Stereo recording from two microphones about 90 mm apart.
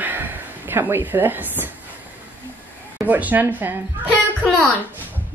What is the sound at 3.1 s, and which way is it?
Speech, 20° right (ahead or behind).